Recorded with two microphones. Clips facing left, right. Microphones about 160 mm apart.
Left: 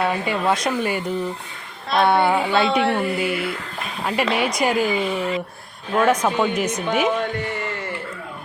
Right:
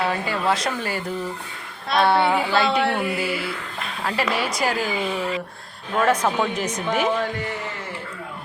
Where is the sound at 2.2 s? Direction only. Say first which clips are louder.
Left 2 dB; centre (ahead or behind).